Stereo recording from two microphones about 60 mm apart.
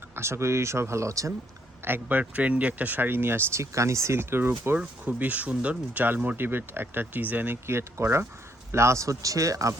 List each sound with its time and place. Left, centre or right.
0.2 s speech: right
1.8 s speech: right
3.6 s speech: right
4.8 s speech: right